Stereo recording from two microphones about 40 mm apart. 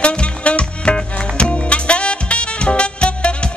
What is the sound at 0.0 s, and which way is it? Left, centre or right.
Music, left.